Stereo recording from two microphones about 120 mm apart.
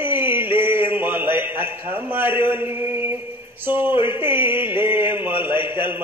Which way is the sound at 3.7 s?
15° right (ahead or behind).